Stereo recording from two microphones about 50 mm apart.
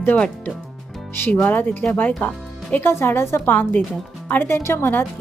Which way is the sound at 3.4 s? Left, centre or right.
Left.